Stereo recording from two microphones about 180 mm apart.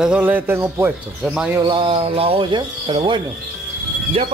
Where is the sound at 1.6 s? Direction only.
25° right (ahead or behind).